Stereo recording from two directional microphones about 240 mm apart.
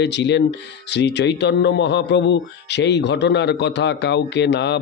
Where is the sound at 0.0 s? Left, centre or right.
Left.